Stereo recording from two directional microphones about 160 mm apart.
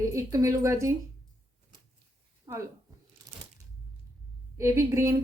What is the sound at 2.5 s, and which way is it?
Speech, 20° right (ahead or behind).